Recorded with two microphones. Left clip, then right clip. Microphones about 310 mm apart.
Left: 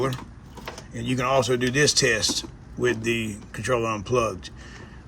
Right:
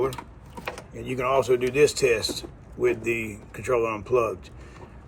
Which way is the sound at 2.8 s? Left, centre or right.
Left.